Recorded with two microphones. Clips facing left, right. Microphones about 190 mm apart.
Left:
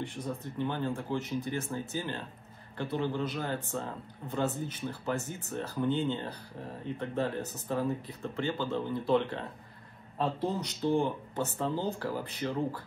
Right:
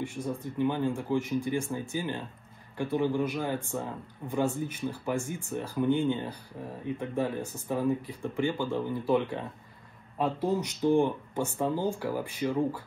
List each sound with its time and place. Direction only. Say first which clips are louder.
0.0 s speech: right 3 dB; 10° right (ahead or behind)